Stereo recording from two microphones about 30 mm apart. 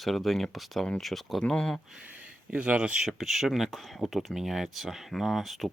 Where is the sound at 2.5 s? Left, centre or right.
Right.